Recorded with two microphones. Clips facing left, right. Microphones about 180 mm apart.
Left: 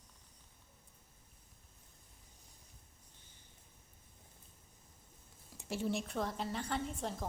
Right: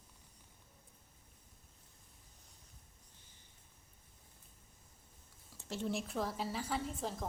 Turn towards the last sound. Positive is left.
turn(degrees=0)  # may be behind; listen again after turning